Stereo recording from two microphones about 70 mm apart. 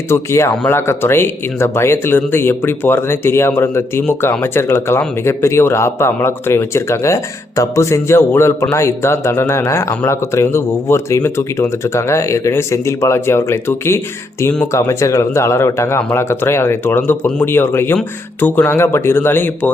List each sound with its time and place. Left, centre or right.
0.1 s speech: left